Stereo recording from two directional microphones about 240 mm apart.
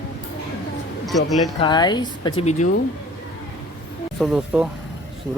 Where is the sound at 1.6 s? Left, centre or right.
Centre.